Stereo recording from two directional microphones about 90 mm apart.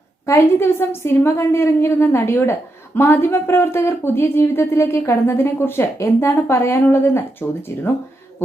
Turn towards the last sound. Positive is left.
turn(degrees=25)  # may be behind; listen again after turning